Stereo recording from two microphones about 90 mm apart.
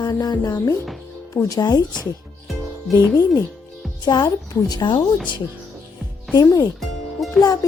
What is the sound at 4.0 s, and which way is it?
Speech, 45° left (ahead or behind).